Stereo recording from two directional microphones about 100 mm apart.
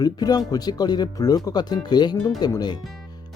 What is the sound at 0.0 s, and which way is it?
Speech, 40° left (ahead or behind).